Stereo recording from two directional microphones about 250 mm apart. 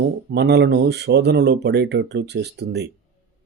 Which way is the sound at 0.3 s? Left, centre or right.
Right.